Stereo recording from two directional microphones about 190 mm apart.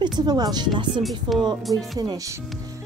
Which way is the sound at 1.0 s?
Centre (ahead or behind).